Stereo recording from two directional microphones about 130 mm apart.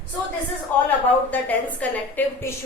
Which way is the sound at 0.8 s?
10° left (ahead or behind).